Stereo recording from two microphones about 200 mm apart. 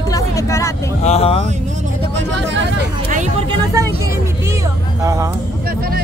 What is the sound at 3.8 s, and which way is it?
Speech, 15° right (ahead or behind).